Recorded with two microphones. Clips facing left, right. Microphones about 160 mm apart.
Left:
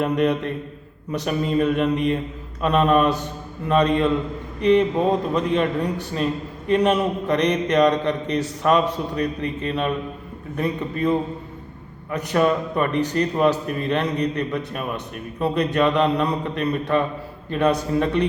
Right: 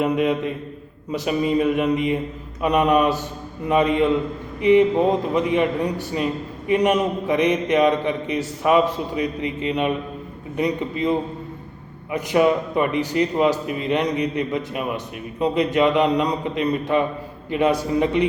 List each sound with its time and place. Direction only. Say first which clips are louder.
0.0 s a man's voice: even; 10° right (ahead or behind)